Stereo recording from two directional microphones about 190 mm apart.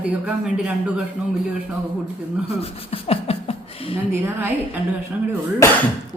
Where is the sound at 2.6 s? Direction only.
30° left (ahead or behind).